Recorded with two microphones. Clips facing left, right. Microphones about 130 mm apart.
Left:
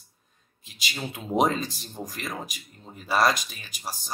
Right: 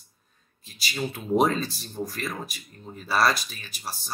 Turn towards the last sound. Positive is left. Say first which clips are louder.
# even
turn(degrees=15)  # may be behind; listen again after turning